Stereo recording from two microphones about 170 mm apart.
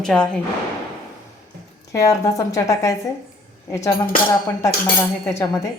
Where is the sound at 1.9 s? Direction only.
20° left (ahead or behind).